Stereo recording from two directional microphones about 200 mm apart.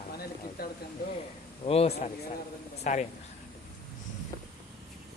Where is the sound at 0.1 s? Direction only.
50° left (ahead or behind).